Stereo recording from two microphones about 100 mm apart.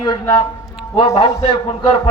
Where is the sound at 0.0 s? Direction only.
45° left (ahead or behind).